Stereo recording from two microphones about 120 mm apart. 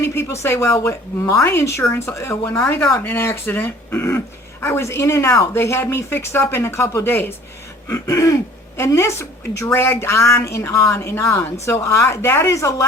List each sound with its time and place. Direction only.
0.0 s speech: 20° left (ahead or behind)